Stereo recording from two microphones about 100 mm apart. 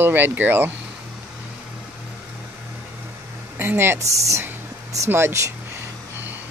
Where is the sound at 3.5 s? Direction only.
20° right (ahead or behind).